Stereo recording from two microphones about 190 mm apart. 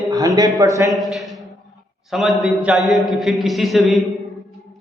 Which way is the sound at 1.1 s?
Centre (ahead or behind).